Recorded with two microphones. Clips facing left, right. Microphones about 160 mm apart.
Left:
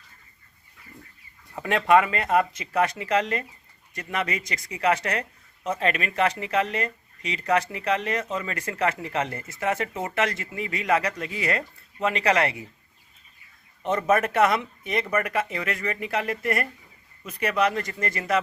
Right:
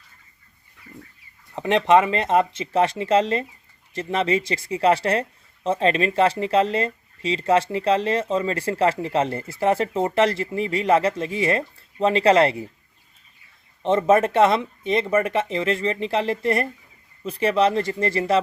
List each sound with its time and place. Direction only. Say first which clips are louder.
1.5 s speech: right 3 dB; 20° right (ahead or behind)
13.8 s speech: right 5 dB; 25° right (ahead or behind)